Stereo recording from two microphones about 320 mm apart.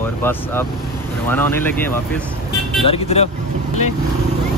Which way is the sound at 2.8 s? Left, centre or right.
Centre.